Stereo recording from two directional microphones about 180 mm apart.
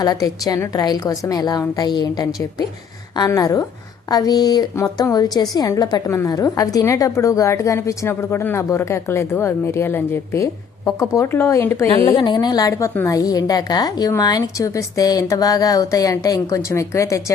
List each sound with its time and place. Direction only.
0.0 s a woman's voice: 20° left (ahead or behind)